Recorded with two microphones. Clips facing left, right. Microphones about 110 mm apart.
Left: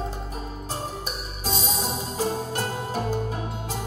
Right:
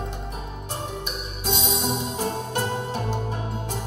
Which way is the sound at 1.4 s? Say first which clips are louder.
Right 2 dB; 40° left (ahead or behind).